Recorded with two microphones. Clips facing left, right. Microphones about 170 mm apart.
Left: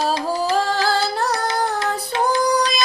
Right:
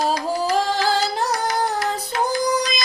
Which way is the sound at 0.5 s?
15° right (ahead or behind).